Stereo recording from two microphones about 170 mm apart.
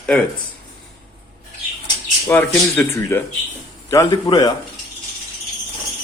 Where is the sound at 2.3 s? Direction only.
10° left (ahead or behind).